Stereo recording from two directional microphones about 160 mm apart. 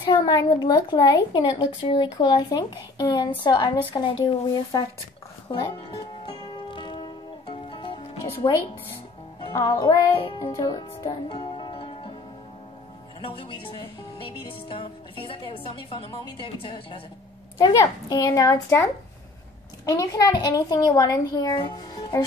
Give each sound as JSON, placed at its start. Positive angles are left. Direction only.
{"t": 0.0, "sound": "speech", "side_deg": 25}
{"t": 5.5, "sound": "speech", "side_deg": 35}
{"t": 6.2, "sound": "music", "side_deg": 30}
{"t": 9.4, "sound": "speech", "side_deg": 25}
{"t": 10.4, "sound": "music", "side_deg": 25}
{"t": 13.2, "sound": "speech", "side_deg": 30}